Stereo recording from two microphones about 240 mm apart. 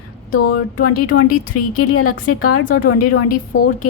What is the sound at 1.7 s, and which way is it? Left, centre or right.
Speech, left.